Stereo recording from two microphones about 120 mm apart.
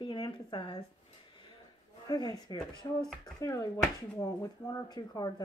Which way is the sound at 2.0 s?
35° left (ahead or behind).